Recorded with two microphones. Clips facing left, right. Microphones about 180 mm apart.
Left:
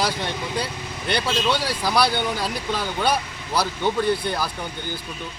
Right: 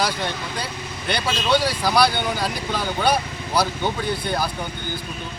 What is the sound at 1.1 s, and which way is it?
Speech, centre (ahead or behind).